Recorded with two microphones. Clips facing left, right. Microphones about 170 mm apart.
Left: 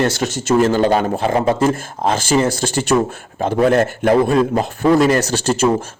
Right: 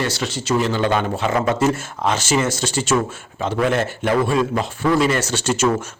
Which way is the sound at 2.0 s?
45° left (ahead or behind).